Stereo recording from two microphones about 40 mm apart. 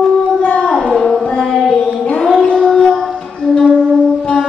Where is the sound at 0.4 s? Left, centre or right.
Left.